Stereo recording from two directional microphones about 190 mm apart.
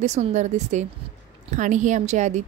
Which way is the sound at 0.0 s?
35° right (ahead or behind).